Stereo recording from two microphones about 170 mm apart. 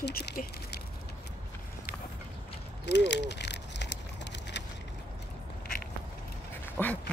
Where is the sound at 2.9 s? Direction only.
90° left.